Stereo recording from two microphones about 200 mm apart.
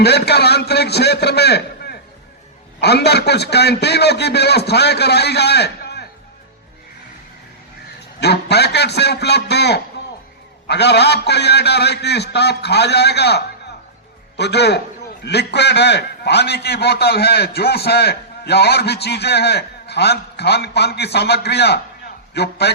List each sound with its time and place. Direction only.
0.0 s a man's voice: 55° left (ahead or behind)
8.2 s a man's voice: 55° left (ahead or behind)